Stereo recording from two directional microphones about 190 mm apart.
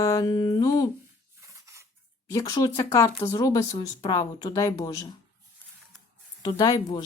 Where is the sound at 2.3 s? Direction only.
20° left (ahead or behind).